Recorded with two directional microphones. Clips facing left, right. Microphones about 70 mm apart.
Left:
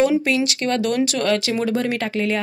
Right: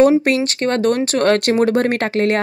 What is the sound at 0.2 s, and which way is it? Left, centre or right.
Speech, right.